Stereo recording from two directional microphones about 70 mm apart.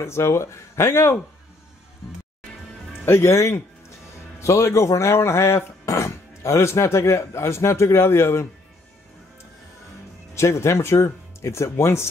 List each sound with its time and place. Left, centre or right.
0.0 s speech: left
3.1 s speech: left
10.3 s speech: left